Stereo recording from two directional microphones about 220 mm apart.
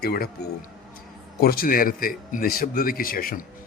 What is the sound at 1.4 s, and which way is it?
A man's voice, 45° left (ahead or behind).